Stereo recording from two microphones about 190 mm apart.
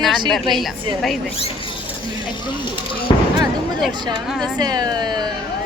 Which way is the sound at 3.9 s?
25° right (ahead or behind).